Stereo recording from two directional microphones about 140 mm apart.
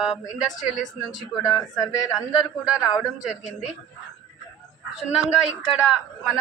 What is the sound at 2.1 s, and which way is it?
Speech, 5° right (ahead or behind).